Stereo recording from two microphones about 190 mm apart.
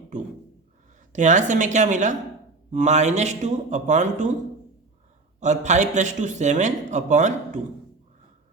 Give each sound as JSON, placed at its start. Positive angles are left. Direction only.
{"t": 1.1, "sound": "speech", "side_deg": -40}
{"t": 5.4, "sound": "speech", "side_deg": -40}